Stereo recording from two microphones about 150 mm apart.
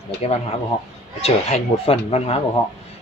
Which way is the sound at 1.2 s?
40° left (ahead or behind).